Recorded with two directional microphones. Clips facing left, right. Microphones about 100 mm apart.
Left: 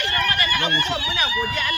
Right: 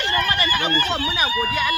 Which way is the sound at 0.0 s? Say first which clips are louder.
Right 2 dB; 35° right (ahead or behind).